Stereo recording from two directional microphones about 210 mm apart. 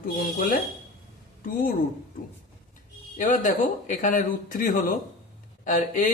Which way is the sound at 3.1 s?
40° left (ahead or behind).